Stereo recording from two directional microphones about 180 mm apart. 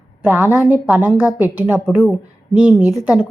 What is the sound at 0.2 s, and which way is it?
A woman's voice, 10° right (ahead or behind).